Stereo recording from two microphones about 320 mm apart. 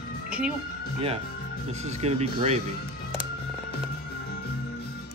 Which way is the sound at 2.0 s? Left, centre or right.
Centre.